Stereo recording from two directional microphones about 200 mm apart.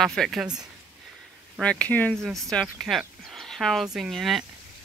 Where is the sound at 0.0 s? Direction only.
Centre (ahead or behind).